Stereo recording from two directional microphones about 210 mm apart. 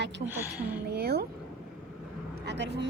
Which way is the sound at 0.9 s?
50° right (ahead or behind).